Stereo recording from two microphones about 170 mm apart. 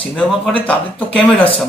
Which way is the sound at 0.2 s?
5° left (ahead or behind).